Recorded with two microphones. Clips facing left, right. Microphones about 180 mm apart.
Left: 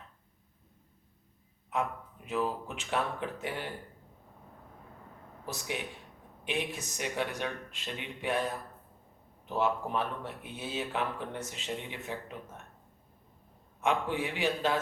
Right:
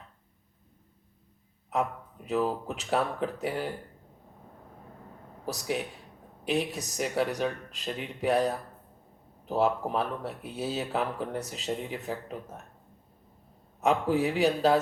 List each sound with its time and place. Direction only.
1.7 s speech: 40° right (ahead or behind)
5.5 s speech: 40° right (ahead or behind)
13.7 s speech: 40° right (ahead or behind)